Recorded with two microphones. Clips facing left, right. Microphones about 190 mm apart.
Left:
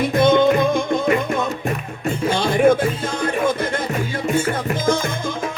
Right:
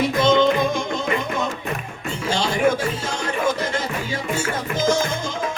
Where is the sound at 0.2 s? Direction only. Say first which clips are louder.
Left 3 dB; 55° left (ahead or behind).